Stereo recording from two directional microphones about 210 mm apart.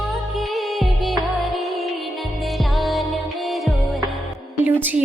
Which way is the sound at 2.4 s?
Centre (ahead or behind).